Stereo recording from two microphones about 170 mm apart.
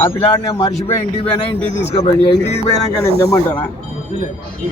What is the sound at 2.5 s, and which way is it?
Speech, 20° left (ahead or behind).